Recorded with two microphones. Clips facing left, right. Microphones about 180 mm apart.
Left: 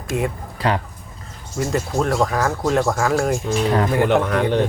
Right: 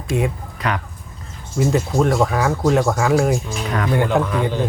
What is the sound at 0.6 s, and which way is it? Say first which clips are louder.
Speech: left 3 dB; 30° left (ahead or behind).